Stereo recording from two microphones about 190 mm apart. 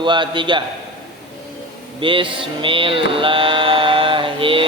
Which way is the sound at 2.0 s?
25° right (ahead or behind).